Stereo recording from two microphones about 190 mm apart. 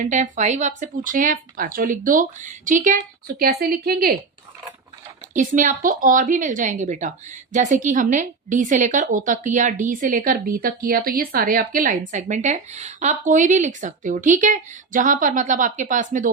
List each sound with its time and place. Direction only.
0.0 s speech: 40° right (ahead or behind)
5.3 s a woman's voice: 40° right (ahead or behind)